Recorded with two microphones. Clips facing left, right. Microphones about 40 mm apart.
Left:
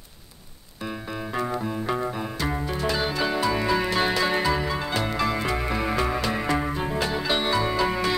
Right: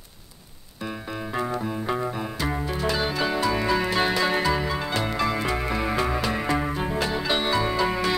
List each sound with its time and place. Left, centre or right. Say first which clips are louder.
1.3 s music: even; centre